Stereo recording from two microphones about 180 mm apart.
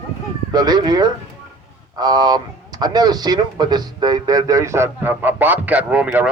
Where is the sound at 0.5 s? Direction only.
20° right (ahead or behind).